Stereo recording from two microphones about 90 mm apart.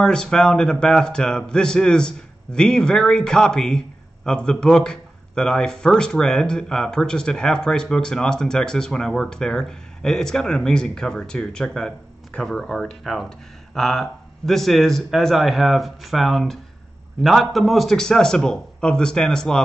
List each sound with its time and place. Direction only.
0.0 s speech: 10° left (ahead or behind)